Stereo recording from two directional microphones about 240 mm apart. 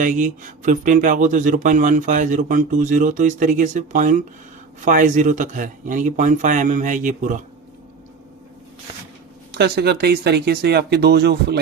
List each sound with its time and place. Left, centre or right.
0.0 s speech: right
9.6 s speech: right